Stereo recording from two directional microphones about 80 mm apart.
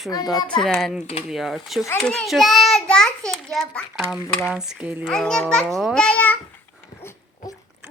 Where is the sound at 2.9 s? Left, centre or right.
Centre.